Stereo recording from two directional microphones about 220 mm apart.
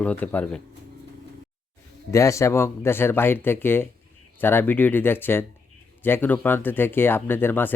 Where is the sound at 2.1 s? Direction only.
15° left (ahead or behind).